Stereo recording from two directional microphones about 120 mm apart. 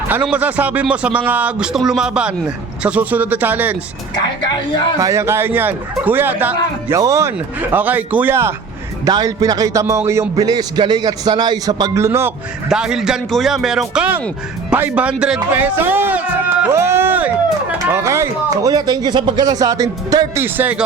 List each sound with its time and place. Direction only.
0.1 s a man's voice: 10° right (ahead or behind)
4.9 s a man's voice: 25° right (ahead or behind)
6.9 s speech: 25° right (ahead or behind)
9.0 s speech: 30° right (ahead or behind)
12.6 s a man's voice: 5° right (ahead or behind); by 20.4 s 30° right (ahead or behind)
20.4 s a man's voice: 15° right (ahead or behind)